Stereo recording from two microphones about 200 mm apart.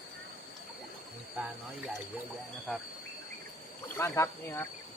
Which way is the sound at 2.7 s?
5° left (ahead or behind).